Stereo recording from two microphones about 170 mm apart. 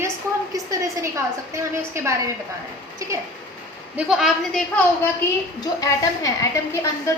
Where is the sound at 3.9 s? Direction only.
Centre (ahead or behind).